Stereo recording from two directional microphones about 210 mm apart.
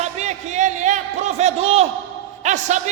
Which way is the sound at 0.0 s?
35° right (ahead or behind).